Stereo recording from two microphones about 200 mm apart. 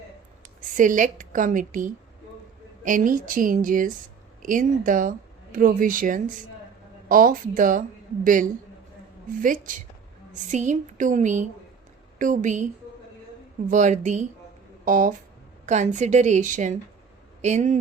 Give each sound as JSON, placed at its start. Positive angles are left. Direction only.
{"t": 0.8, "sound": "speech", "side_deg": -40}